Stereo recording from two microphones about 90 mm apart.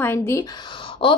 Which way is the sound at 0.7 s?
70° left (ahead or behind).